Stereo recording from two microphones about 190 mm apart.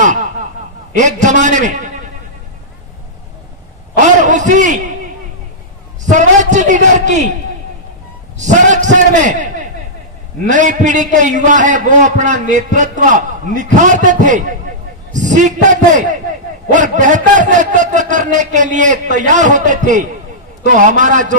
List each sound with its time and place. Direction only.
0.9 s a man's voice: 40° right (ahead or behind)
4.0 s a sound: 40° right (ahead or behind)
6.1 s a man's voice: 40° right (ahead or behind)
8.4 s a man's voice: 40° right (ahead or behind)